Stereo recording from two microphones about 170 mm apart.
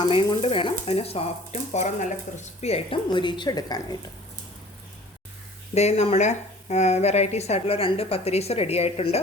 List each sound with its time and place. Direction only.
0.0 s a woman's voice: 30° left (ahead or behind)
5.7 s speech: 40° left (ahead or behind)